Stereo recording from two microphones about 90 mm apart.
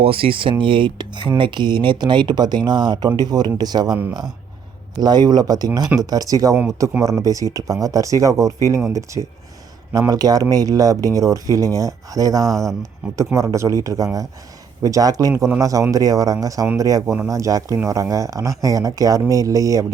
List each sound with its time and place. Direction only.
0.0 s speech: 90° right; by 3.9 s 50° right (ahead or behind)
4.9 s speech: 50° right (ahead or behind); by 9.2 s 35° right (ahead or behind)
10.1 s speech: 45° right (ahead or behind)